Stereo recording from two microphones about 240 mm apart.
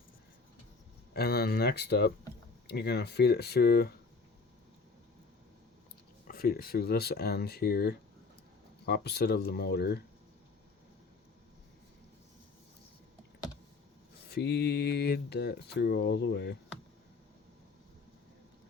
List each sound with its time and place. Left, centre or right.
1.1 s speech: left
6.2 s speech: left
14.3 s speech: left